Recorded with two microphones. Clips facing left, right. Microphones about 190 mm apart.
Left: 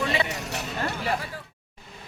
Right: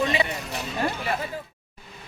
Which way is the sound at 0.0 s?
15° right (ahead or behind).